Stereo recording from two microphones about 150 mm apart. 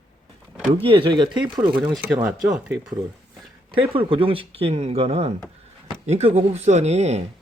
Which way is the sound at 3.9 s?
35° right (ahead or behind).